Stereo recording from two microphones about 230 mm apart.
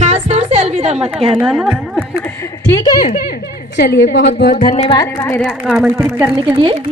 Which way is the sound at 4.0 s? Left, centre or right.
Left.